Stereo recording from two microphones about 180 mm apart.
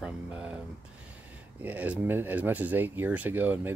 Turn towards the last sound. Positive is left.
turn(degrees=-10)  # may be behind; listen again after turning